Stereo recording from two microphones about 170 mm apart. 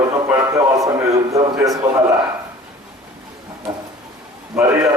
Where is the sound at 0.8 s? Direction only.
20° right (ahead or behind).